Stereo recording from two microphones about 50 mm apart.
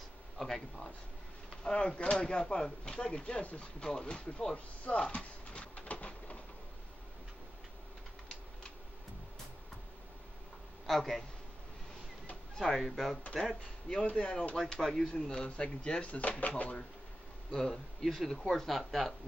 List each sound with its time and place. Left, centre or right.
0.4 s speech: centre
1.6 s speech: centre
5.0 s pigeon: left
10.9 s speech: centre
12.5 s speech: centre
13.6 s speech: centre
14.6 s speech: centre; by 16.7 s left
17.5 s speech: centre